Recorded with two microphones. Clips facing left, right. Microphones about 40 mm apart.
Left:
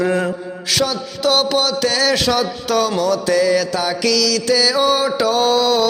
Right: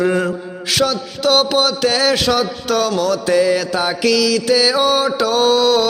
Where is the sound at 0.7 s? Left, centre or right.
Centre.